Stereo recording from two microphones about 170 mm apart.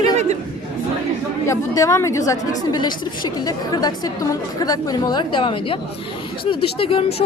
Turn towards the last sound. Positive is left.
turn(degrees=35)  # may be behind; listen again after turning